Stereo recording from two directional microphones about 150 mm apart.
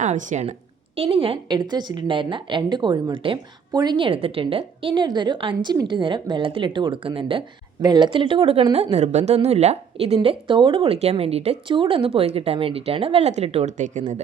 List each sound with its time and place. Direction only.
0.0 s speech: 55° right (ahead or behind)
0.9 s a woman's voice: 40° right (ahead or behind); by 14.0 s 55° right (ahead or behind)